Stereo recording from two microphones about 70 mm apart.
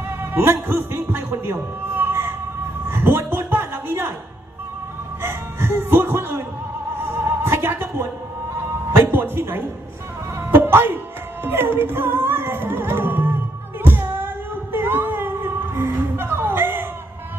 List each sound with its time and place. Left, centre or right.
0.2 s a man's voice: right
2.9 s a sound: right
5.2 s speech: right
7.0 s music: right
9.0 s speech: right
10.5 s music: right
13.8 s a sound: right